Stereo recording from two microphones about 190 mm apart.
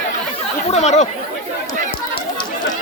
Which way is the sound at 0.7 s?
35° left (ahead or behind).